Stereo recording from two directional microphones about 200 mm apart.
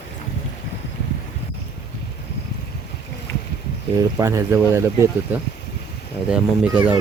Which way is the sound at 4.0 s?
15° right (ahead or behind).